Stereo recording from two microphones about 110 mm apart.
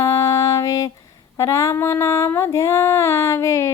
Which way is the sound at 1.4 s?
30° left (ahead or behind).